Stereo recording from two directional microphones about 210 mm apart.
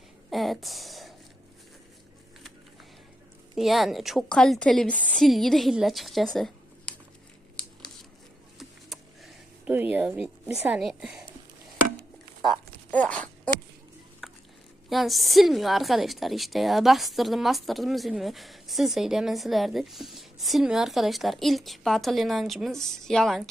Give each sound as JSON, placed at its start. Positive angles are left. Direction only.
{"t": 0.3, "sound": "speech", "side_deg": 0}
{"t": 3.5, "sound": "a woman's voice", "side_deg": 0}
{"t": 8.5, "sound": "a sound", "side_deg": 0}
{"t": 10.5, "sound": "a woman's voice", "side_deg": 0}
{"t": 12.5, "sound": "a sound", "side_deg": 5}
{"t": 14.8, "sound": "a woman's voice", "side_deg": 0}